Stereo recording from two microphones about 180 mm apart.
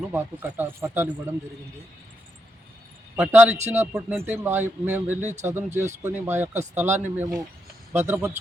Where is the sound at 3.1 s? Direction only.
10° right (ahead or behind).